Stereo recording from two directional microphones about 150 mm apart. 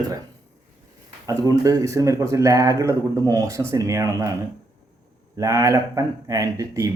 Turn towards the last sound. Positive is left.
turn(degrees=-20)  # may be behind; listen again after turning